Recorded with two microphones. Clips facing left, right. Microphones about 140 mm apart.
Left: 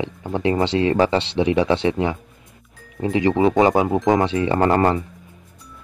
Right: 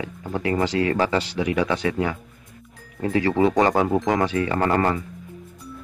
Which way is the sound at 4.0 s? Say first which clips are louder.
Left 4 dB; 30° left (ahead or behind).